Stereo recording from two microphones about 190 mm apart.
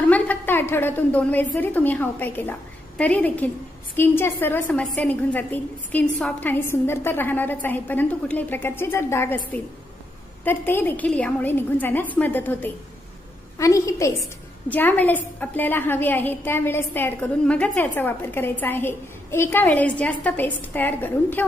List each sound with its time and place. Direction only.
0.0 s a woman's voice: 10° left (ahead or behind)